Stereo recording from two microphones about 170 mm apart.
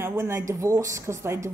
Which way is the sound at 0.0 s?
20° right (ahead or behind).